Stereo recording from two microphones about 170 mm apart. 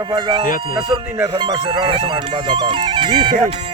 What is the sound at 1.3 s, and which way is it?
Speech, 30° right (ahead or behind).